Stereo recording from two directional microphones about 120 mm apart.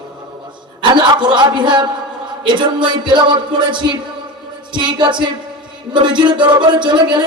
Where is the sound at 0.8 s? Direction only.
40° right (ahead or behind).